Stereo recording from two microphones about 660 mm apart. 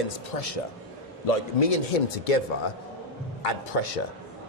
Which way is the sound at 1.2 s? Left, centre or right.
Left.